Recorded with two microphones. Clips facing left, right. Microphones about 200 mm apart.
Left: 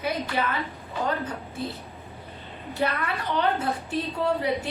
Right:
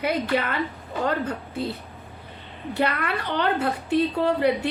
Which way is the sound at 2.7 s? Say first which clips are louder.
Right 2 dB; 70° right (ahead or behind).